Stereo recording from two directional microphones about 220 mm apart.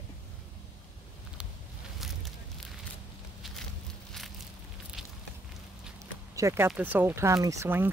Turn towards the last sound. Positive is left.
turn(degrees=-10)  # may be behind; listen again after turning